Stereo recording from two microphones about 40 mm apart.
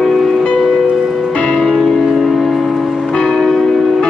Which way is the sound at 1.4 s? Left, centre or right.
Centre.